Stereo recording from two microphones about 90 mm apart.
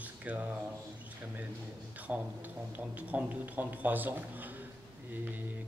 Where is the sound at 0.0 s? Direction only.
15° right (ahead or behind).